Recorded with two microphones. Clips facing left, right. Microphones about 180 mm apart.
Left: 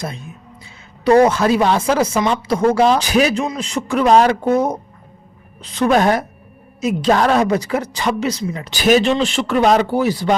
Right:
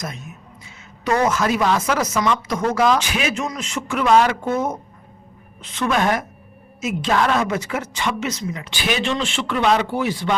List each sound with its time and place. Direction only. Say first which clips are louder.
0.0 s speech: left 4 dB; 30° left (ahead or behind)